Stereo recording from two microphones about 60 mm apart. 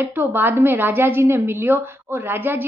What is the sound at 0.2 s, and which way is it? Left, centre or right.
A woman's voice, right.